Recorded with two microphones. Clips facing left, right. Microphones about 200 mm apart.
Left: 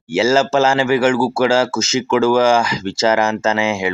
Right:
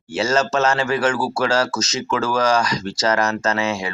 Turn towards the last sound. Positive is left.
turn(degrees=25)  # may be behind; listen again after turning